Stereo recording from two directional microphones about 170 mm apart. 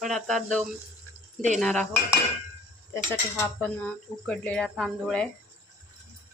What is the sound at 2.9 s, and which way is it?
Speech, 15° left (ahead or behind).